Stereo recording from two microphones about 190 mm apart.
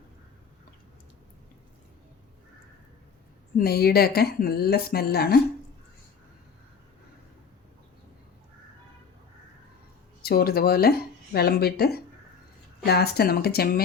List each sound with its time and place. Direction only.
3.6 s speech: 55° left (ahead or behind)
10.2 s speech: 55° left (ahead or behind)